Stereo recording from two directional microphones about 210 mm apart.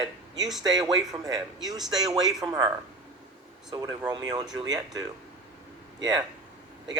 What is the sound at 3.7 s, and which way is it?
Speech, 20° right (ahead or behind).